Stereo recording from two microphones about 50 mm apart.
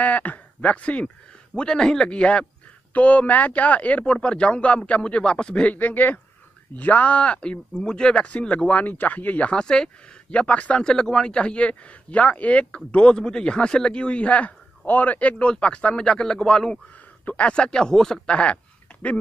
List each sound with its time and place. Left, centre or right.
0.0 s speech: left
1.5 s a man's voice: centre
5.8 s a man's voice: left
9.5 s a man's voice: centre
10.8 s a man's voice: centre
17.2 s a sound: left
17.5 s speech: centre
18.3 s a man's voice: left